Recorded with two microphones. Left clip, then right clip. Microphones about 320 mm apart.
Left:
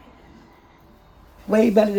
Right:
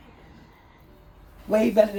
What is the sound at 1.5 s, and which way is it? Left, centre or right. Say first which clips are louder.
Speech: left 2 dB; left.